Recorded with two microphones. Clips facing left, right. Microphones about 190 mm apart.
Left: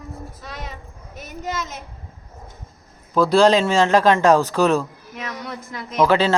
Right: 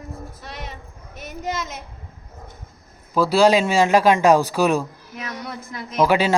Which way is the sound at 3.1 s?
5° right (ahead or behind).